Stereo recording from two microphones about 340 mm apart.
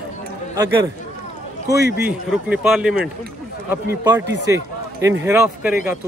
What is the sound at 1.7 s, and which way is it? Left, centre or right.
Speech, left.